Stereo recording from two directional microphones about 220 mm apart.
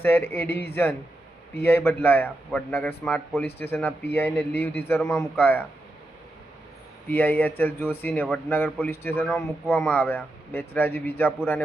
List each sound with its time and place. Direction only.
0.0 s a man's voice: 10° left (ahead or behind)
0.4 s speech: 45° left (ahead or behind)
0.7 s a man's voice: 10° left (ahead or behind)
7.1 s a man's voice: 10° left (ahead or behind)